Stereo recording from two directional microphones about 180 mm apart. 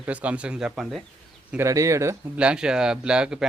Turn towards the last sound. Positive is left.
turn(degrees=-5)  # may be behind; listen again after turning